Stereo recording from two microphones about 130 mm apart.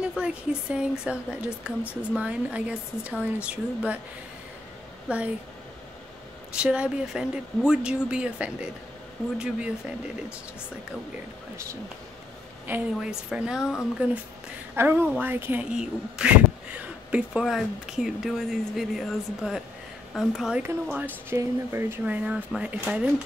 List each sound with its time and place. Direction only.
0.0 s speech: 10° right (ahead or behind)
5.0 s speech: 10° right (ahead or behind)
6.5 s speech: 5° right (ahead or behind)
12.6 s speech: 10° right (ahead or behind)
14.8 s speech: 20° right (ahead or behind)
20.6 s speech: 15° right (ahead or behind)